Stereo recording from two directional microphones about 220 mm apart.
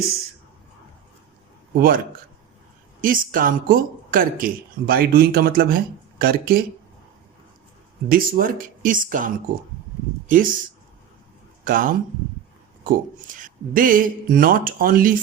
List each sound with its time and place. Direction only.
1.7 s speech: 40° right (ahead or behind)
3.0 s speech: 40° right (ahead or behind)
8.1 s speech: 40° right (ahead or behind)
11.6 s speech: 40° right (ahead or behind)